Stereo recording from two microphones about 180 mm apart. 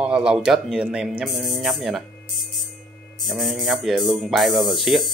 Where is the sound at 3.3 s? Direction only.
Centre (ahead or behind).